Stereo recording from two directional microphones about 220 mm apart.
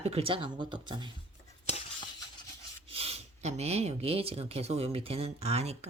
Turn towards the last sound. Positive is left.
turn(degrees=-30)  # may be behind; listen again after turning